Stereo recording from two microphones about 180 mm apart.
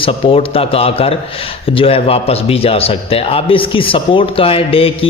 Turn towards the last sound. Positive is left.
turn(degrees=30)  # may be behind; listen again after turning